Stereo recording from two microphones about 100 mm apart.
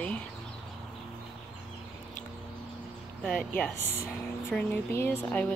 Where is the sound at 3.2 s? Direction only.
10° left (ahead or behind).